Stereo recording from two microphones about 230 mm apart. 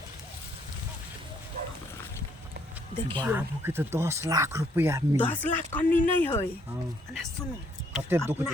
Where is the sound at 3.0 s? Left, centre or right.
Right.